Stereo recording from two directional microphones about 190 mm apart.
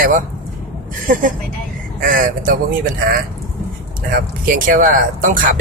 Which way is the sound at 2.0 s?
45° right (ahead or behind).